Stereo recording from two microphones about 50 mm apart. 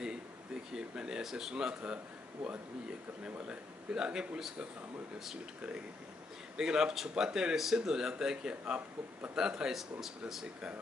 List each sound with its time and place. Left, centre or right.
0.7 s speech: centre
3.4 s speech: centre
5.6 s speech: centre